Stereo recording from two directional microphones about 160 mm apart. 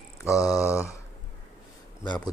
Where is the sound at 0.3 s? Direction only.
20° left (ahead or behind).